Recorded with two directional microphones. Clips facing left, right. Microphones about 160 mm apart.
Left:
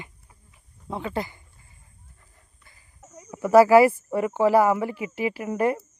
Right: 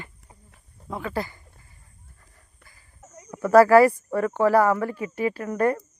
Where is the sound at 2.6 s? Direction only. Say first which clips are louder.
Right 3 dB; 25° left (ahead or behind).